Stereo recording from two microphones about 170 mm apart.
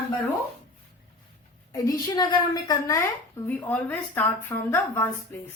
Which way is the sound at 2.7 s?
20° left (ahead or behind).